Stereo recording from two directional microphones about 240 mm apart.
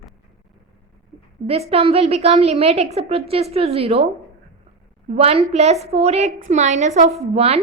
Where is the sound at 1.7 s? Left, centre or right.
Right.